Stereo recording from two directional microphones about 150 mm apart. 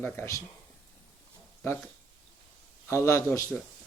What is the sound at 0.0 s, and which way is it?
Speech, 15° left (ahead or behind).